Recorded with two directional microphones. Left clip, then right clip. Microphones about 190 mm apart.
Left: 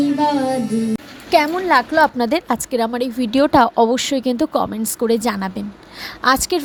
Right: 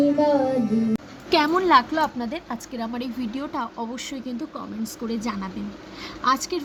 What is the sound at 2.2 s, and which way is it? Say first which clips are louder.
A woman's voice: left 12 dB; 50° left (ahead or behind).